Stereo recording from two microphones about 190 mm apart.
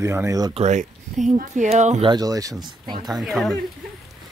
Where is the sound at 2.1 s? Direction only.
20° right (ahead or behind).